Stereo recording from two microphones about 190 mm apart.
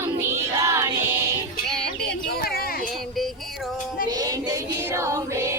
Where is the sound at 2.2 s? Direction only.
55° left (ahead or behind).